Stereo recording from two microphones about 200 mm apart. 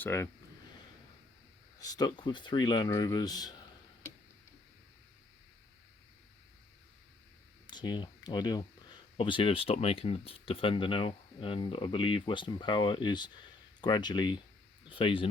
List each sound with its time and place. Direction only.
0.0 s speech: 10° left (ahead or behind)
1.8 s speech: 20° left (ahead or behind)
7.7 s speech: 20° left (ahead or behind)